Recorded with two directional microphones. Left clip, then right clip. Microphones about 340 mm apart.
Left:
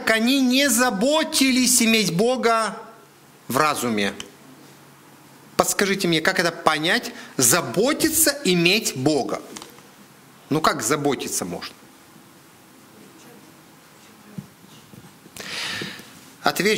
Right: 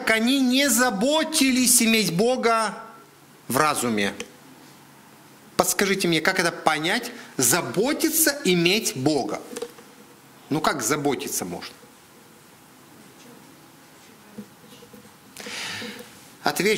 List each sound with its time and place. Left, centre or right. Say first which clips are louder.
0.0 s a woman's voice: left 2 dB; centre
5.6 s a woman's voice: left 1 dB; centre
10.5 s a woman's voice: left 3 dB; centre
15.3 s a sound: left 3 dB; centre
16.4 s a woman's voice: left 2 dB; centre